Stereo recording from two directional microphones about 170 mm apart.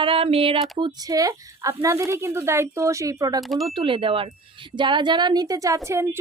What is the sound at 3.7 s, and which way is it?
A woman's voice, 30° right (ahead or behind).